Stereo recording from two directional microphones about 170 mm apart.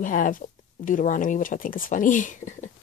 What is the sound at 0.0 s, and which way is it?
Speech, 55° left (ahead or behind).